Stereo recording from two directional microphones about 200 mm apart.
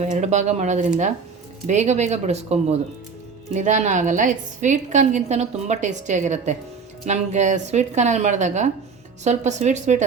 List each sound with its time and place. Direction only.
0.0 s a woman's voice: 35° right (ahead or behind)